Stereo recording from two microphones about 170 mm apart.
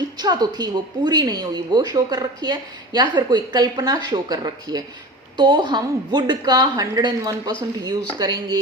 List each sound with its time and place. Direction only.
0.2 s a woman's voice: 25° right (ahead or behind)